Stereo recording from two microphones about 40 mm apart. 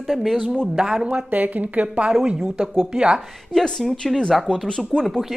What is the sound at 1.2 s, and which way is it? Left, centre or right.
Speech, right.